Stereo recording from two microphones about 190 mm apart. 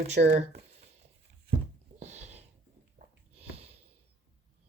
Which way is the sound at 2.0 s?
35° right (ahead or behind).